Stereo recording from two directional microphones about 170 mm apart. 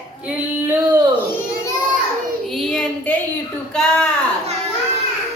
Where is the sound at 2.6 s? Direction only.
5° left (ahead or behind).